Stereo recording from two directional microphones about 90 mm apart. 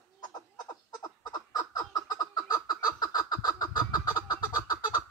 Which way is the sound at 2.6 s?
45° left (ahead or behind).